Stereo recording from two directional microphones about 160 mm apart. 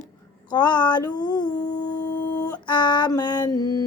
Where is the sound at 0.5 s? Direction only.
25° left (ahead or behind).